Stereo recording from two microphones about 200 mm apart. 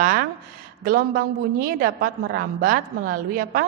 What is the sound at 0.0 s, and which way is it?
A woman's voice, 45° right (ahead or behind).